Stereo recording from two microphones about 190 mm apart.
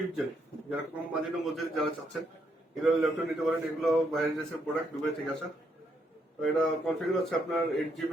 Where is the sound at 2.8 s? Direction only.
Centre (ahead or behind).